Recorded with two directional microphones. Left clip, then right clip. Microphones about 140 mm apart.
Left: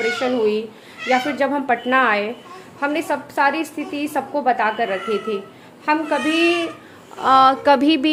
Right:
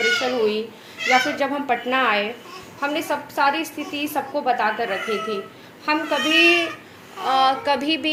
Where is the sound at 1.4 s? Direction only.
65° left (ahead or behind); by 6.7 s 90° left.